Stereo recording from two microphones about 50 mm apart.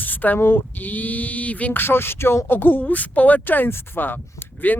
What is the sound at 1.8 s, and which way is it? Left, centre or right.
Speech, left.